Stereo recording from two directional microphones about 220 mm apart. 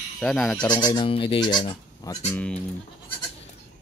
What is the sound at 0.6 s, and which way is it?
Speech, 20° left (ahead or behind).